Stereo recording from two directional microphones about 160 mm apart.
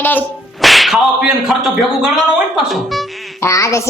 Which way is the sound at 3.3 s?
20° left (ahead or behind).